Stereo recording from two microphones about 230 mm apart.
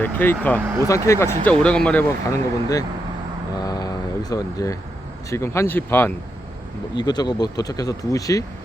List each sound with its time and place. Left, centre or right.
0.0 s speech: centre
3.6 s vehicle: centre
5.3 s speech: centre